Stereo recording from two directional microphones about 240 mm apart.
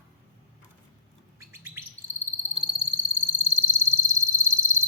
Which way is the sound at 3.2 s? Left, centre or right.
Centre.